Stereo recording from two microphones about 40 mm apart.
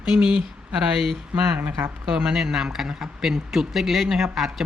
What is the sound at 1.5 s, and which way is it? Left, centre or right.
Speech, right.